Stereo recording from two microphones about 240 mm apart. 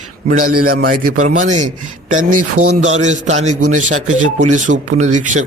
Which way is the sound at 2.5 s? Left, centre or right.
Right.